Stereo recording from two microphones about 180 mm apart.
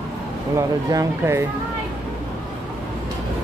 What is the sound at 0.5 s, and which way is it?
Speech, 15° right (ahead or behind).